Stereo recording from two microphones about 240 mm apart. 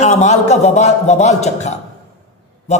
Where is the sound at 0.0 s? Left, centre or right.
Left.